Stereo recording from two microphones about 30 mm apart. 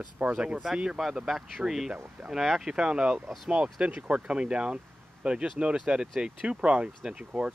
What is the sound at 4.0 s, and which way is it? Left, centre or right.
Speech, right.